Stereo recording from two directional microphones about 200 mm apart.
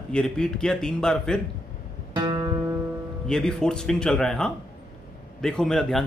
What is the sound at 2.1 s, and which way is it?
Music, 20° right (ahead or behind).